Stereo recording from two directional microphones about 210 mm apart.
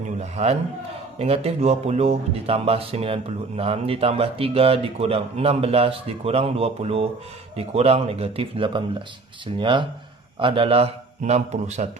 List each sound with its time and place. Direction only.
0.2 s a man's voice: 30° right (ahead or behind)